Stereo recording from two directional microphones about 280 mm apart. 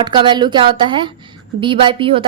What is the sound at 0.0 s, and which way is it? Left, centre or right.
A woman's voice, centre.